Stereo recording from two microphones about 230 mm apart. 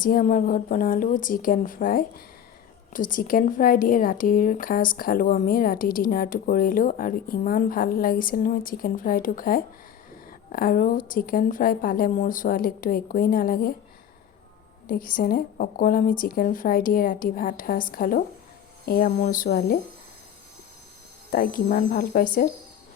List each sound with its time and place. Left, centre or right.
0.0 s speech: left
14.8 s speech: left
21.3 s speech: left